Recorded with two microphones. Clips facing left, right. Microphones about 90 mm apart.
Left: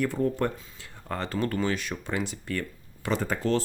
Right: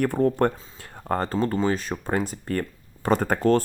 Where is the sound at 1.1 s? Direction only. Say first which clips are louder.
Right 5 dB; 40° right (ahead or behind).